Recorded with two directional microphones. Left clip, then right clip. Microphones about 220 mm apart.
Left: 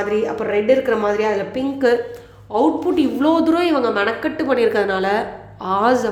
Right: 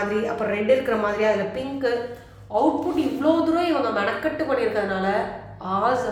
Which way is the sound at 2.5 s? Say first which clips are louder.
Left 4 dB; 45° left (ahead or behind).